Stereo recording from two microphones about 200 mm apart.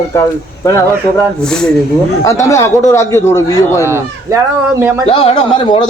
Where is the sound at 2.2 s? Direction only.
15° left (ahead or behind).